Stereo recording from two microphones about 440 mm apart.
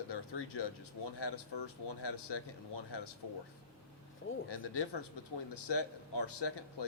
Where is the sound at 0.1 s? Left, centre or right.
Left.